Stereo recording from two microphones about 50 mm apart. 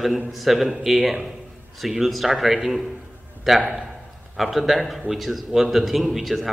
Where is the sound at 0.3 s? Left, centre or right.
Centre.